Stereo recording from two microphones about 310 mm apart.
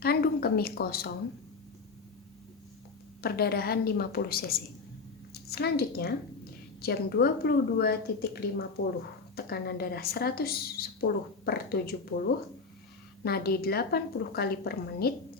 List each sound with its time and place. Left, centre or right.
0.0 s a sound: left
3.2 s a woman's voice: left
8.8 s speech: left
9.3 s a woman's voice: left
13.2 s a woman's voice: left